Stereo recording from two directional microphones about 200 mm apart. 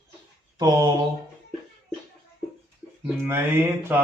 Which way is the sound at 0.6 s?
20° right (ahead or behind).